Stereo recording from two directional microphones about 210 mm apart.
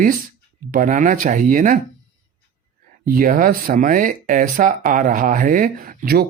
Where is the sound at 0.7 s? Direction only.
40° right (ahead or behind).